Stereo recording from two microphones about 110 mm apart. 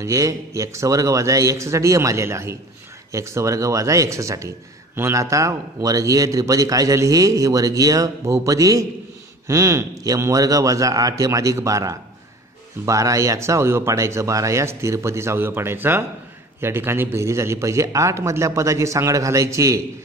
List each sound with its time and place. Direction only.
0.0 s a man's voice: 30° right (ahead or behind)